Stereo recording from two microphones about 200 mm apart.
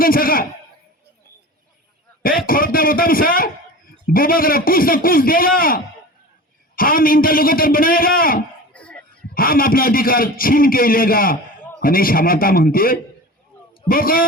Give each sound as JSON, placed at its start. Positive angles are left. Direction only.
{"t": 0.0, "sound": "a man's voice", "side_deg": 45}
{"t": 2.5, "sound": "a man's voice", "side_deg": 45}
{"t": 8.7, "sound": "a sound", "side_deg": 5}
{"t": 9.3, "sound": "a man's voice", "side_deg": 45}